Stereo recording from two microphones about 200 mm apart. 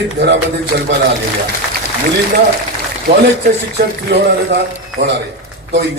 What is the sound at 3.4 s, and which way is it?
A man's voice, 55° right (ahead or behind).